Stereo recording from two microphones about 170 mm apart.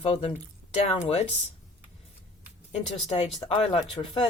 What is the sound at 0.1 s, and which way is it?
Speech, 40° left (ahead or behind).